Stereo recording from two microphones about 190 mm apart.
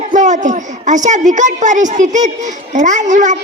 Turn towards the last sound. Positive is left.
turn(degrees=-40)  # may be behind; listen again after turning